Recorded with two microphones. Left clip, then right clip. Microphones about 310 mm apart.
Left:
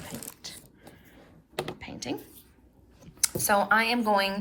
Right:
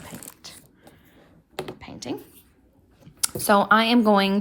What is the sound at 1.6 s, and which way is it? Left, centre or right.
Computer keyboard, centre.